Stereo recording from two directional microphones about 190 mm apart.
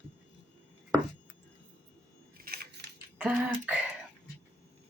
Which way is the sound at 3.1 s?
10° right (ahead or behind).